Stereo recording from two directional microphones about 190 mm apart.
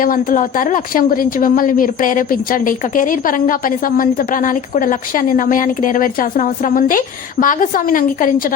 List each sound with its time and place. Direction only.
0.0 s a woman's voice: 45° left (ahead or behind)